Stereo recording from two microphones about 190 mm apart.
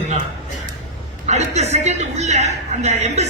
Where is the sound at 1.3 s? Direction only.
35° right (ahead or behind).